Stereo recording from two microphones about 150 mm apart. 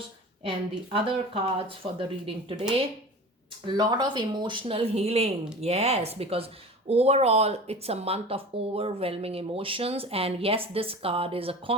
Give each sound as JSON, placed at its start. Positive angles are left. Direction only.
{"t": 0.9, "sound": "speech", "side_deg": -35}
{"t": 3.7, "sound": "speech", "side_deg": -30}